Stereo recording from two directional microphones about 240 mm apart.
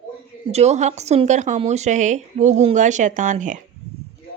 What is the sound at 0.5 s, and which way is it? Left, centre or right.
A woman's voice, right.